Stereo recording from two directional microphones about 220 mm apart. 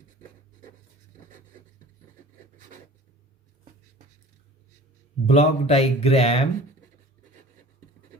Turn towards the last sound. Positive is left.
turn(degrees=25)  # may be behind; listen again after turning